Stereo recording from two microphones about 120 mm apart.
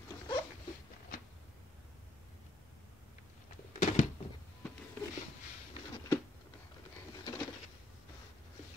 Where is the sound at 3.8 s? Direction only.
80° left.